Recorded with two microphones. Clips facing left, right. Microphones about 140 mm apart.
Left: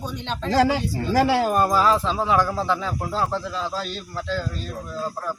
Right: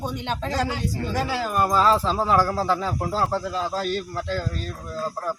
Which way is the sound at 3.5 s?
45° right (ahead or behind).